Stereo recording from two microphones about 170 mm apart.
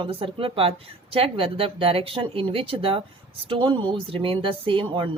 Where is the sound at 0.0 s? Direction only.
30° right (ahead or behind).